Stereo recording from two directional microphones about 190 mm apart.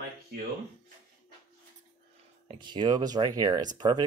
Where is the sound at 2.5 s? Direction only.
25° right (ahead or behind).